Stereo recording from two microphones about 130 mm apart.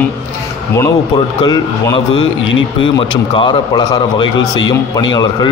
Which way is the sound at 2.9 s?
40° left (ahead or behind).